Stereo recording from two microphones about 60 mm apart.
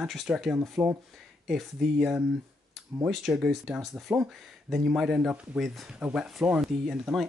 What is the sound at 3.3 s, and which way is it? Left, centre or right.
Speech, centre.